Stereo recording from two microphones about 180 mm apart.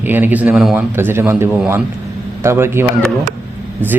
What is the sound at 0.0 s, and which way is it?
Speech, 10° right (ahead or behind).